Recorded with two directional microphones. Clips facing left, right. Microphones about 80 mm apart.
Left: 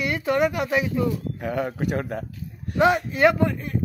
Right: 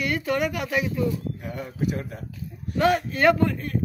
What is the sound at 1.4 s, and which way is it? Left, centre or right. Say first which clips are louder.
A man's voice: left 4 dB; left.